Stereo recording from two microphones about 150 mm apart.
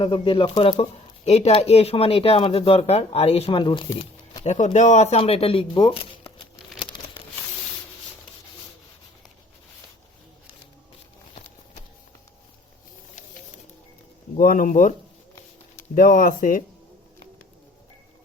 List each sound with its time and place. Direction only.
0.0 s speech: 35° left (ahead or behind)
4.4 s speech: 50° left (ahead or behind); by 6.1 s 35° left (ahead or behind)
14.3 s speech: 70° left (ahead or behind)
16.0 s speech: 70° left (ahead or behind)